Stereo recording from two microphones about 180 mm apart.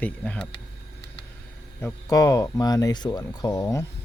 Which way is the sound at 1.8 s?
15° left (ahead or behind).